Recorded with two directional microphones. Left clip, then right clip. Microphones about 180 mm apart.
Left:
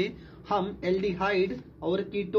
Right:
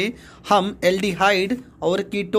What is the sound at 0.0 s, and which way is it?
Speech, 45° right (ahead or behind).